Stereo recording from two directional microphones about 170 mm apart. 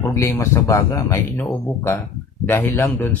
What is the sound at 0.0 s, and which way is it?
Speech, 15° left (ahead or behind).